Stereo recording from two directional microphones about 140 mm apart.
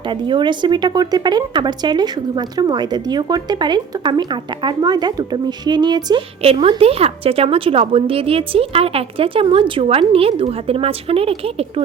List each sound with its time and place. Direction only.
0.1 s speech: 35° right (ahead or behind)
6.4 s a woman's voice: 40° right (ahead or behind)